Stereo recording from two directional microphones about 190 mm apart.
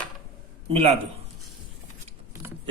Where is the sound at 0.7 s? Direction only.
30° right (ahead or behind).